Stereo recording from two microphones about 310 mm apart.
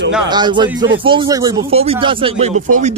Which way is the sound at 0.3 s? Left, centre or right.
Centre.